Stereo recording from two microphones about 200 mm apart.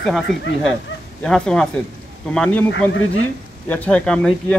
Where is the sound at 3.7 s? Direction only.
5° left (ahead or behind).